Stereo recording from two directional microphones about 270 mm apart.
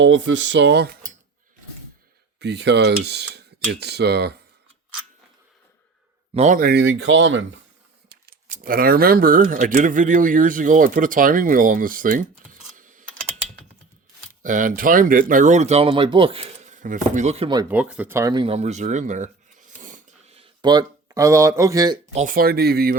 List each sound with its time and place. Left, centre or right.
0.0 s speech: right
2.4 s speech: right
6.3 s speech: right
8.1 s speech: right
14.4 s speech: right; by 21.9 s centre
22.1 s speech: right